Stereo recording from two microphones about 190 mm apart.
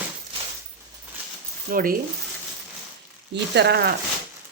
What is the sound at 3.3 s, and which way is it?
Speech, 65° right (ahead or behind).